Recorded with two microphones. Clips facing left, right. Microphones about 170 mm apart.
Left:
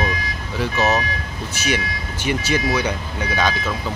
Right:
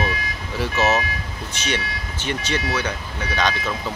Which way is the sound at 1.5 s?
10° left (ahead or behind).